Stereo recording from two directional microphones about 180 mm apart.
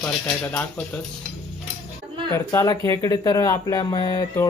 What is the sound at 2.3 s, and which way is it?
Speech, 15° left (ahead or behind).